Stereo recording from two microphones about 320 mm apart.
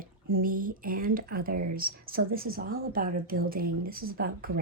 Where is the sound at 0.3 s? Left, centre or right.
Right.